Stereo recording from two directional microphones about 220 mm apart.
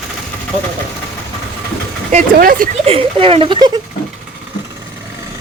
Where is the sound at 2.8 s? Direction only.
25° right (ahead or behind).